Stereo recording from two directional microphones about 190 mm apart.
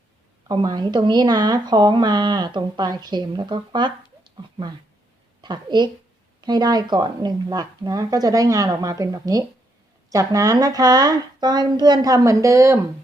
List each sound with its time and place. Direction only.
0.4 s speech: 20° right (ahead or behind)
5.4 s a woman's voice: 25° right (ahead or behind)